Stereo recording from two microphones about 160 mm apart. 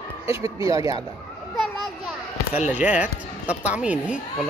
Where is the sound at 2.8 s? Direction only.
10° right (ahead or behind).